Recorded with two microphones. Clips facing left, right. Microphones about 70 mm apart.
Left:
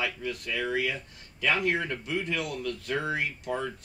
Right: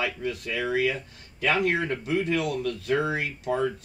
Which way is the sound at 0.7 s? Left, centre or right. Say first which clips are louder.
Right 4 dB; right.